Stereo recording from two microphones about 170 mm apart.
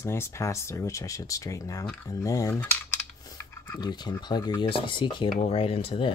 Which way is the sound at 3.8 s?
25° left (ahead or behind).